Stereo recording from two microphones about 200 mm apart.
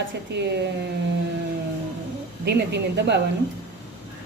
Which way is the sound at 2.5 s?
60° right (ahead or behind).